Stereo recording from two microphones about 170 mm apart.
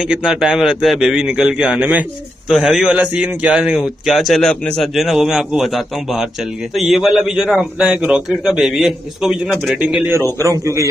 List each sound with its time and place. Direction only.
0.1 s a man's voice: 5° right (ahead or behind)
6.7 s a man's voice: centre (ahead or behind)
10.4 s a man's voice: 15° right (ahead or behind)